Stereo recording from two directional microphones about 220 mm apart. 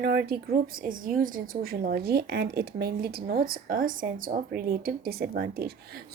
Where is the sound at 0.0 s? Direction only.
45° right (ahead or behind).